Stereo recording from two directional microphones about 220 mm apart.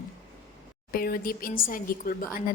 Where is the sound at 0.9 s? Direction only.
40° left (ahead or behind).